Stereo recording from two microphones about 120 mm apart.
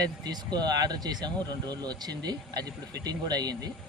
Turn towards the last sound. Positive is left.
turn(degrees=-35)  # may be behind; listen again after turning